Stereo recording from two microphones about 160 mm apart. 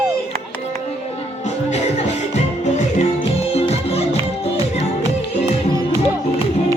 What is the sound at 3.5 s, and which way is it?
Music, 40° left (ahead or behind).